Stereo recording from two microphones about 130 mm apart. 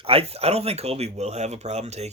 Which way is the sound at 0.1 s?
50° right (ahead or behind).